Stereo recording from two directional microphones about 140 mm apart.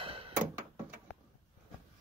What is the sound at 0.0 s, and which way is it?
Door, 40° right (ahead or behind).